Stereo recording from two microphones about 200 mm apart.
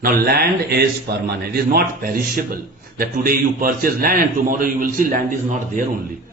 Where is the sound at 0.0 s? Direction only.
50° right (ahead or behind).